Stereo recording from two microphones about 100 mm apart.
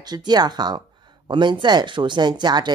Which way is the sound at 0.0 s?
45° right (ahead or behind).